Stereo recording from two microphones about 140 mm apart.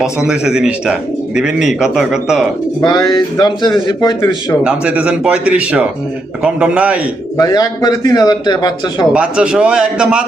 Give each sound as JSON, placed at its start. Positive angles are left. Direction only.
{"t": 0.0, "sound": "speech", "side_deg": -5}
{"t": 2.8, "sound": "a man's voice", "side_deg": 30}
{"t": 4.6, "sound": "speech", "side_deg": -10}
{"t": 7.3, "sound": "a man's voice", "side_deg": 25}
{"t": 9.1, "sound": "speech", "side_deg": -5}